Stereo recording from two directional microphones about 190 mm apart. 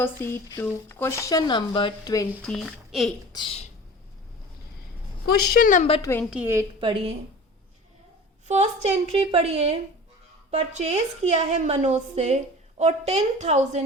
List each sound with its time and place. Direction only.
0.0 s speech: 10° left (ahead or behind)
2.4 s speech: 5° left (ahead or behind)
3.3 s speech: 30° left (ahead or behind)
5.2 s a woman's voice: 50° left (ahead or behind)
6.0 s speech: 15° left (ahead or behind)
6.3 s a woman's voice: 10° right (ahead or behind)
8.4 s speech: 35° right (ahead or behind)